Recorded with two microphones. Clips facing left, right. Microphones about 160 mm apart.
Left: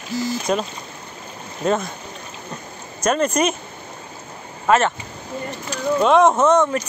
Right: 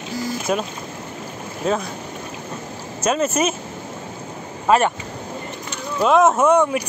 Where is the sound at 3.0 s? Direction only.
5° right (ahead or behind).